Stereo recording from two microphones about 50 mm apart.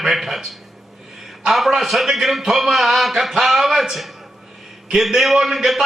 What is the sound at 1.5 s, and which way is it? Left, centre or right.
A man's voice, centre.